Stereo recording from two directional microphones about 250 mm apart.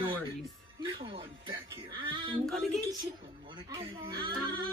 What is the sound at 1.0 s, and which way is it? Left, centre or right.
Speech, right.